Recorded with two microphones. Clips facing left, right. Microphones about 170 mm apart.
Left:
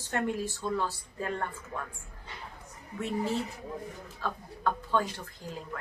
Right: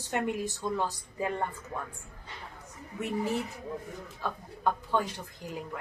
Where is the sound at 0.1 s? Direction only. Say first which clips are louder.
Even; 15° right (ahead or behind).